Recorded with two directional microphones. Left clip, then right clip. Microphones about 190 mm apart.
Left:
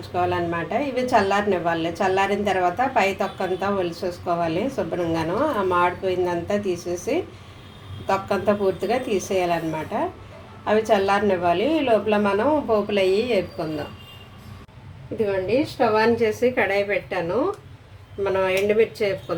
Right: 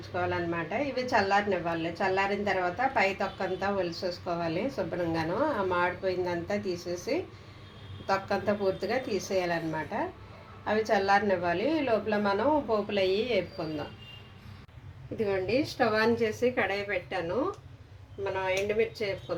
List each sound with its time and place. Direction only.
0.1 s a woman's voice: centre (ahead or behind)
15.2 s a woman's voice: 5° right (ahead or behind)
16.2 s a woman's voice: centre (ahead or behind)